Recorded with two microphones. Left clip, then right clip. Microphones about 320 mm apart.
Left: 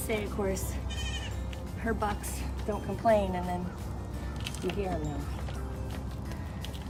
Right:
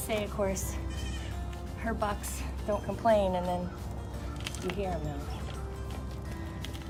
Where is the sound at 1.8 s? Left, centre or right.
Centre.